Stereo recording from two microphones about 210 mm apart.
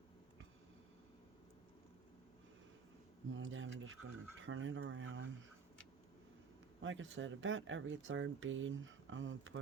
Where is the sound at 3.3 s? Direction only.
65° right (ahead or behind).